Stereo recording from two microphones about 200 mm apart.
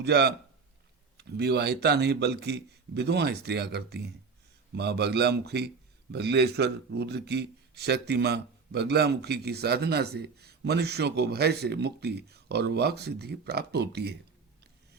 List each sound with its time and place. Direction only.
0.0 s speech: 55° right (ahead or behind)